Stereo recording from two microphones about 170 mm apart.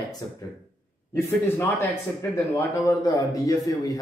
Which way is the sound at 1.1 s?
15° left (ahead or behind).